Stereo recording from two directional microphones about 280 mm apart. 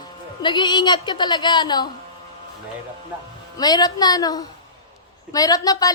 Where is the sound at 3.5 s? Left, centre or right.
Centre.